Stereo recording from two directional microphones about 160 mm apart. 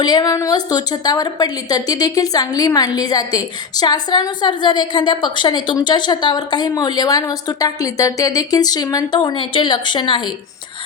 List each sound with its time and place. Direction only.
0.0 s a woman's voice: 25° left (ahead or behind)